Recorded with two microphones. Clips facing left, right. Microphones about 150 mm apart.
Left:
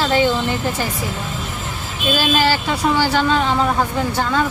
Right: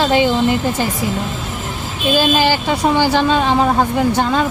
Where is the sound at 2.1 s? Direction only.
15° right (ahead or behind).